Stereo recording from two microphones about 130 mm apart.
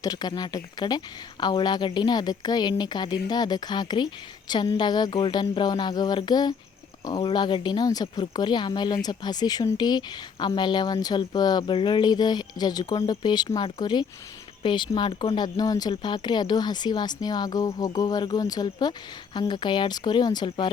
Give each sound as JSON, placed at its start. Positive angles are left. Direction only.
{"t": 0.0, "sound": "speech", "side_deg": 30}